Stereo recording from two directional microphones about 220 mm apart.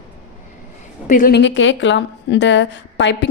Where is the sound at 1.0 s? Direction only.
40° left (ahead or behind).